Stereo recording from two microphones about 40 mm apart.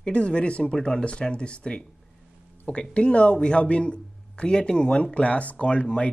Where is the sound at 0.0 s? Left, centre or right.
Left.